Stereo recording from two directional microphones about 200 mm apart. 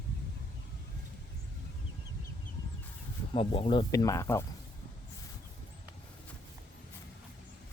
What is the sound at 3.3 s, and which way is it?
Speech, 30° left (ahead or behind).